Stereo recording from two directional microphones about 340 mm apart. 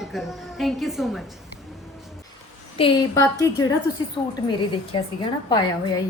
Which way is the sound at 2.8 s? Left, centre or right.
Centre.